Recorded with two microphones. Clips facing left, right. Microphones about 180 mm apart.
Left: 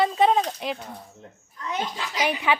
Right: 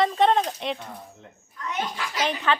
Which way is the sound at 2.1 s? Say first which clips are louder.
Left 1 dB; 10° left (ahead or behind).